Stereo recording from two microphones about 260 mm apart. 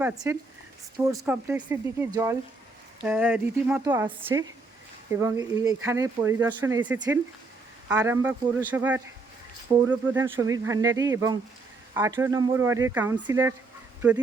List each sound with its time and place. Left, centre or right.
0.0 s speech: centre